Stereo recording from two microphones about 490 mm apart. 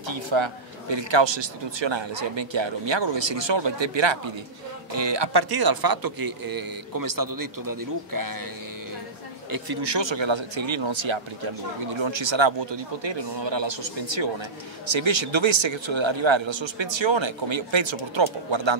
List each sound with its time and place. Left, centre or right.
0.0 s a man's voice: right
9.5 s speech: right